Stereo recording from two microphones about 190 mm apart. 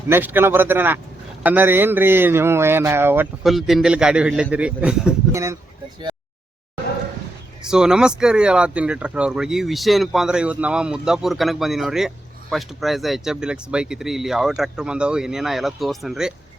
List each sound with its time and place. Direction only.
0.1 s a man's voice: 10° right (ahead or behind)
3.4 s a man's voice: centre (ahead or behind)
5.3 s speech: 15° right (ahead or behind)
7.7 s speech: 5° right (ahead or behind)